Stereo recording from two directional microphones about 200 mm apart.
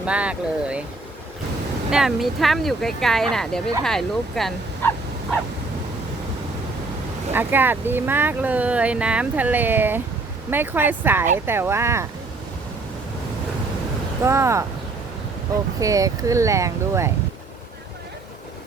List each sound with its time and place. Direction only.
0.0 s speech: 5° right (ahead or behind)
1.9 s speech: centre (ahead or behind)
7.3 s speech: 10° right (ahead or behind)
14.3 s speech: 15° right (ahead or behind)
15.8 s speech: 15° right (ahead or behind)